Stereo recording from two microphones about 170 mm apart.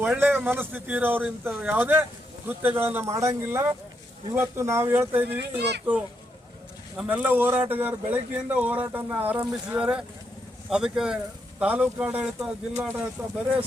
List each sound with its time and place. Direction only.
0.0 s speech: 10° right (ahead or behind)
5.4 s speech: 80° right
6.9 s speech: 10° right (ahead or behind)